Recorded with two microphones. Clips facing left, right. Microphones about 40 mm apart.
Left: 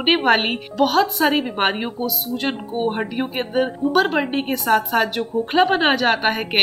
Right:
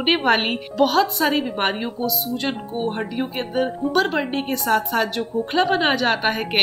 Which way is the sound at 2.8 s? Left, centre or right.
Centre.